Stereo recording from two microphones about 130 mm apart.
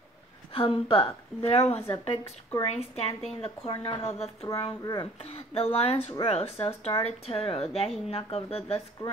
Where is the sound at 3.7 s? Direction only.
40° left (ahead or behind).